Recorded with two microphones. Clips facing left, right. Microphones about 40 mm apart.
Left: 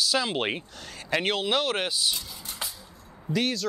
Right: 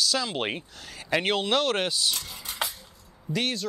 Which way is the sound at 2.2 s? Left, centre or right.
Right.